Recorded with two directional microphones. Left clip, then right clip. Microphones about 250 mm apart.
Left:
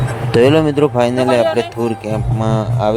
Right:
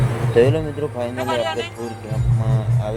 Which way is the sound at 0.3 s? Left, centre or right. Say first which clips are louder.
Left 6 dB; left.